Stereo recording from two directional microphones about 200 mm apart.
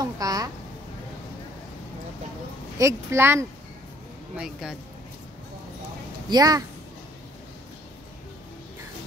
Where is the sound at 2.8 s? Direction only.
10° right (ahead or behind).